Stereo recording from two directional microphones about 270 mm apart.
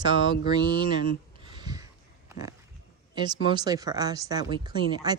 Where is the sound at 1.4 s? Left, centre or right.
Centre.